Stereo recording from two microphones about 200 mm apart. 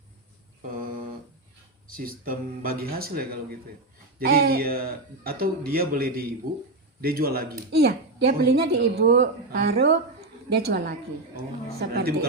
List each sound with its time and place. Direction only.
0.7 s speech: 45° right (ahead or behind)